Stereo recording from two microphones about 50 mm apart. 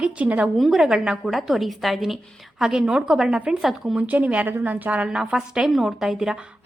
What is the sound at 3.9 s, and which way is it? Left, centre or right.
A woman's voice, right.